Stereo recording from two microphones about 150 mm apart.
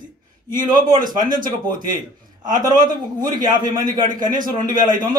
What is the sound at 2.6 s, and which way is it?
A man's voice, 30° right (ahead or behind).